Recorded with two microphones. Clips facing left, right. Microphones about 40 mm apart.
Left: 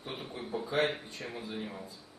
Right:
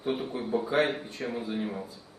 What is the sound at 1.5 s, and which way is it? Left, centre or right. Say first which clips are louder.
Speech: right 7 dB; centre.